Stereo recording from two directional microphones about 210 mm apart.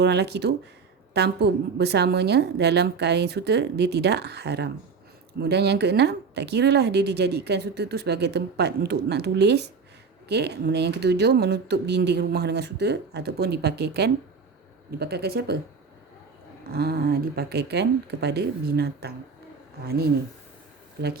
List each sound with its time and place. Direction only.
0.0 s speech: 50° right (ahead or behind)
16.6 s speech: 45° right (ahead or behind)